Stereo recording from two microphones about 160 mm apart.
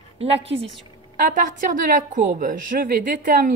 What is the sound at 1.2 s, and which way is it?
A woman's voice, 55° right (ahead or behind).